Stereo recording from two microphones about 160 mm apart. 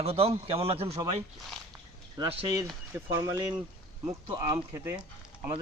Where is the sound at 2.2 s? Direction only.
25° right (ahead or behind).